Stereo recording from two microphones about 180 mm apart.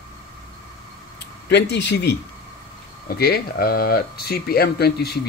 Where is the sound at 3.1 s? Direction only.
55° left (ahead or behind).